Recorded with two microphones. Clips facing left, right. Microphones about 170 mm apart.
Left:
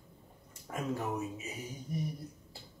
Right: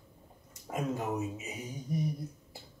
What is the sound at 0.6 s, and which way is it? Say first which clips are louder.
Speech: right 2 dB; 15° right (ahead or behind).